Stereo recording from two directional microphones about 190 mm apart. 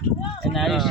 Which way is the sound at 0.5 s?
Centre (ahead or behind).